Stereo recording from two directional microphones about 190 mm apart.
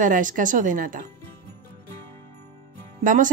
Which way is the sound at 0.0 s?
45° right (ahead or behind).